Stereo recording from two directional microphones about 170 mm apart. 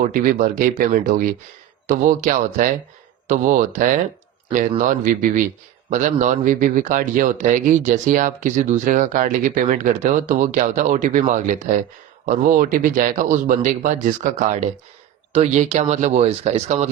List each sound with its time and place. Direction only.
0.0 s speech: 55° right (ahead or behind)